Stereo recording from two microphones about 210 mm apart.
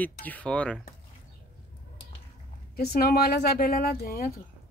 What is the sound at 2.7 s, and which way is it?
Speech, 45° left (ahead or behind).